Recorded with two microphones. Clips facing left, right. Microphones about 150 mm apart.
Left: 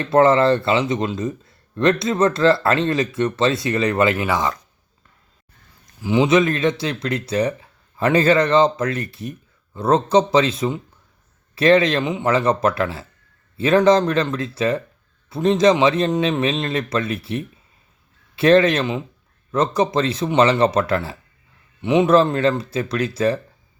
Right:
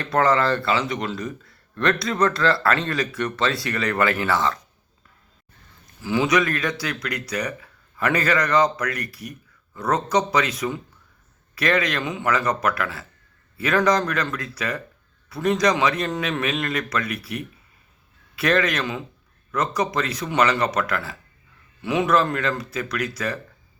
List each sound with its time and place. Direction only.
0.0 s a man's voice: 25° left (ahead or behind)
6.0 s a man's voice: 20° left (ahead or behind)